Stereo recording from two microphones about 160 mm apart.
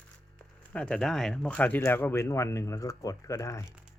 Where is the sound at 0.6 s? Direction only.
5° left (ahead or behind).